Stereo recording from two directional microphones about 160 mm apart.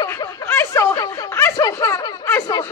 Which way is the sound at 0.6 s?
20° left (ahead or behind).